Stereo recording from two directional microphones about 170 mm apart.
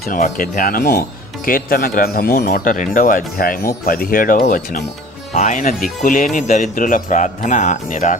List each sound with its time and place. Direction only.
0.2 s speech: 55° left (ahead or behind)